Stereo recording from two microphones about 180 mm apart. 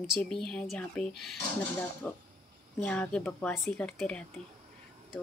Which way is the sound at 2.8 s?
5° left (ahead or behind).